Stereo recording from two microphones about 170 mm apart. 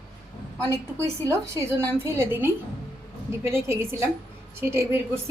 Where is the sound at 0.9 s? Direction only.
15° right (ahead or behind).